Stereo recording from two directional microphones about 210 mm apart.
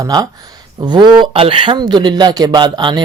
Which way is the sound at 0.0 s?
20° right (ahead or behind).